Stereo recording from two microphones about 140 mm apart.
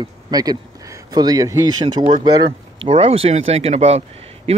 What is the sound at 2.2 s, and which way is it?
A man's voice, 40° right (ahead or behind).